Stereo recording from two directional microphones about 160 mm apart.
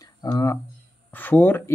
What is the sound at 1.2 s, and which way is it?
Speech, 10° left (ahead or behind).